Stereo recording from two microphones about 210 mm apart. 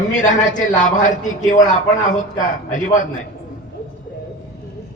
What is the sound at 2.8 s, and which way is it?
Speech, 40° left (ahead or behind).